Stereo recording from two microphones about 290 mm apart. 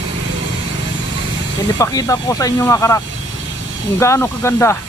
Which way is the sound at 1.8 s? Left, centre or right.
Centre.